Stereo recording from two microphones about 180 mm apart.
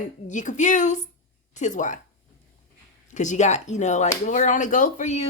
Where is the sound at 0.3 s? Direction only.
45° left (ahead or behind).